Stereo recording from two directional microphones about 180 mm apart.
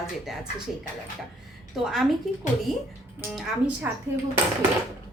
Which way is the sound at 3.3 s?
10° right (ahead or behind).